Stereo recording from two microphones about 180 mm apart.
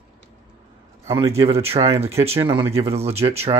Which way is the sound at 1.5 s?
35° right (ahead or behind).